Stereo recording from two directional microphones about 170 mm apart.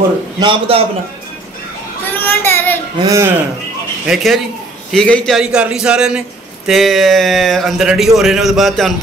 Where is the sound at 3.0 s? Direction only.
20° right (ahead or behind).